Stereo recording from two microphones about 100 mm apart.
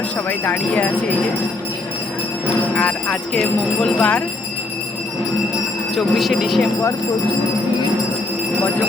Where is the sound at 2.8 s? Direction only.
10° left (ahead or behind).